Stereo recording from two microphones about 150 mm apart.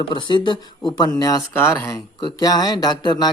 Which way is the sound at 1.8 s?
25° left (ahead or behind).